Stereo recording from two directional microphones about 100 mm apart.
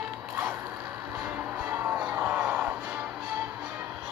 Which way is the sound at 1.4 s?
20° right (ahead or behind).